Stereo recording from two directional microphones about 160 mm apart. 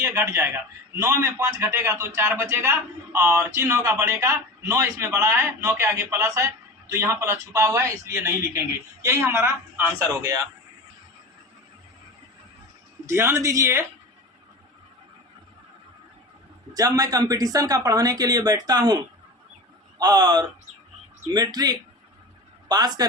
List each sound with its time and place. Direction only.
0.0 s a man's voice: 20° right (ahead or behind)
13.1 s a man's voice: 15° right (ahead or behind)
16.7 s speech: 25° right (ahead or behind)
20.0 s speech: 25° right (ahead or behind)